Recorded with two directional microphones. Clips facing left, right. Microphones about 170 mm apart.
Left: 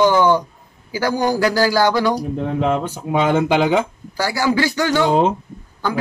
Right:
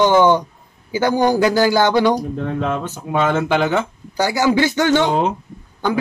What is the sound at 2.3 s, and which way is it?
Speech, 15° left (ahead or behind).